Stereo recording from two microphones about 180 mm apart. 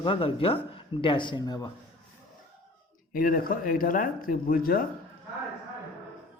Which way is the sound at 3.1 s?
50° left (ahead or behind).